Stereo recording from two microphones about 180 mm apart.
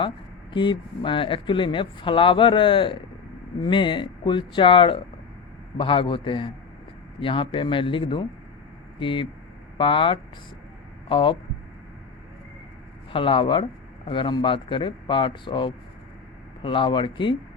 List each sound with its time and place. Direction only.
0.5 s speech: 25° left (ahead or behind)
13.1 s speech: 30° left (ahead or behind)